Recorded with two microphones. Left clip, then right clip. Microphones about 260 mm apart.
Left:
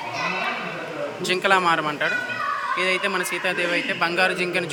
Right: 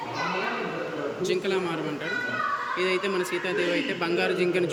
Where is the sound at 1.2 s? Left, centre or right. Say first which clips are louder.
Left 9 dB; centre.